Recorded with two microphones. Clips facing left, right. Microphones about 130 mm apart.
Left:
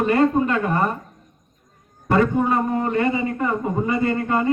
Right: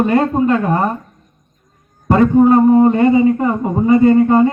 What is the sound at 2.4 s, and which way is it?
A man's voice, 25° right (ahead or behind).